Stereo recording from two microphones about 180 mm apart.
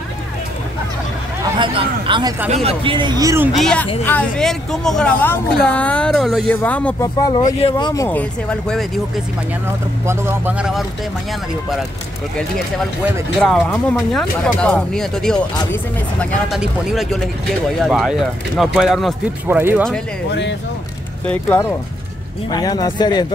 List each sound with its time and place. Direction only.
1.6 s speech: 25° right (ahead or behind)
3.5 s speech: centre (ahead or behind)
7.0 s speech: 20° left (ahead or behind)
7.4 s speech: 35° left (ahead or behind)
7.7 s speech: 20° left (ahead or behind); by 9.0 s 5° left (ahead or behind)
10.0 s speech: 10° right (ahead or behind)
13.4 s speech: 5° left (ahead or behind)
19.4 s speech: 10° right (ahead or behind)
21.3 s speech: 10° left (ahead or behind)
22.5 s speech: 20° left (ahead or behind)